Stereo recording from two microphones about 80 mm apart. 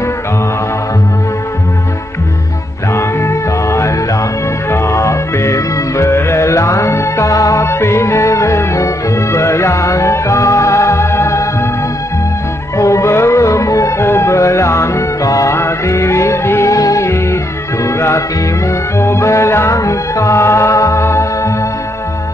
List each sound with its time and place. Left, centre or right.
2.9 s music: left
12.7 s music: left